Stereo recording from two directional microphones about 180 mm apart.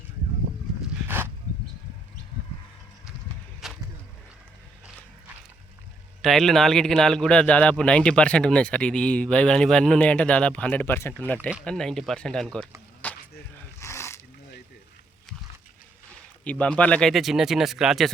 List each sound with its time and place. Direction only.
1.0 s dog: 10° right (ahead or behind)
3.6 s a sound: centre (ahead or behind)
6.2 s speech: centre (ahead or behind)
11.3 s speech: 5° right (ahead or behind)
13.0 s skateboard: 10° left (ahead or behind)
13.7 s a sound: 15° left (ahead or behind)
16.4 s speech: 5° left (ahead or behind)